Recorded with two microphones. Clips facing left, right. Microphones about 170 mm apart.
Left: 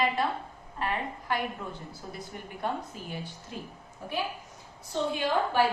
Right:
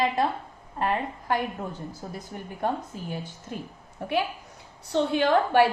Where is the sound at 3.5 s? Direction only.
50° right (ahead or behind).